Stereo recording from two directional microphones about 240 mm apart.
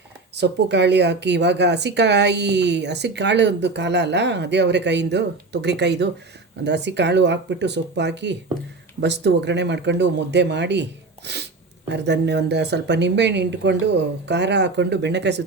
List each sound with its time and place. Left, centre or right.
0.3 s speech: right